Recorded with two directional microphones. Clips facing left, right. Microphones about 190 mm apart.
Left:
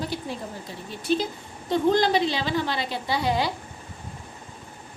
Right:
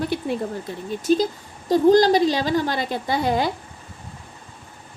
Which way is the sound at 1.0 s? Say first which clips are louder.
Right 5 dB; 40° right (ahead or behind).